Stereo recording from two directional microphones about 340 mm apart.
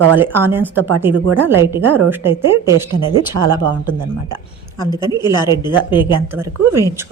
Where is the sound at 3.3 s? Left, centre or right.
Right.